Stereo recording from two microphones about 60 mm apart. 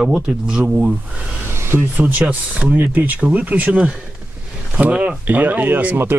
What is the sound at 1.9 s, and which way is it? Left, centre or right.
Speech, right.